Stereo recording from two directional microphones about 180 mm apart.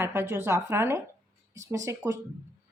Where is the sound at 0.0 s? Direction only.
15° right (ahead or behind).